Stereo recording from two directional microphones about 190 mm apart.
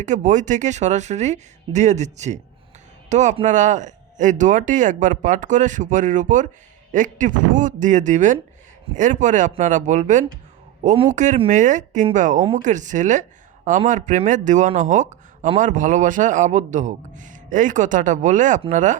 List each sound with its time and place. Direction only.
0.0 s speech: 40° right (ahead or behind)